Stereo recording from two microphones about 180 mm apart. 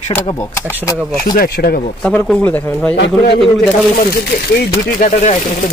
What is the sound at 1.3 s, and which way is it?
Speech, 55° left (ahead or behind).